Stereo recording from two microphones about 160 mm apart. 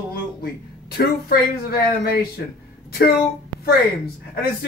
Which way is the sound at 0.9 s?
70° left (ahead or behind).